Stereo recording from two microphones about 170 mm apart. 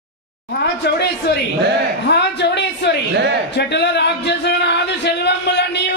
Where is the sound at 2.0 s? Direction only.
80° left.